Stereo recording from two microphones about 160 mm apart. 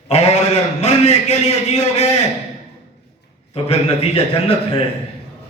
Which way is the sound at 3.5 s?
40° left (ahead or behind).